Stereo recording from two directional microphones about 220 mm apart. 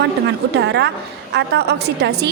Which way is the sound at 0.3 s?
50° right (ahead or behind).